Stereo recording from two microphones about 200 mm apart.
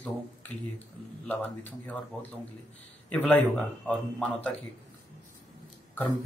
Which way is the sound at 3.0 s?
5° left (ahead or behind).